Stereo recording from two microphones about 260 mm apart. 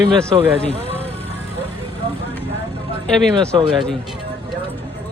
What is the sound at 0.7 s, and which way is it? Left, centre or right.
Vehicle, right.